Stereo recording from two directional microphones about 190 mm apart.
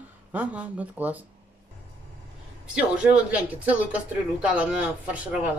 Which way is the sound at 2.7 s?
5° right (ahead or behind).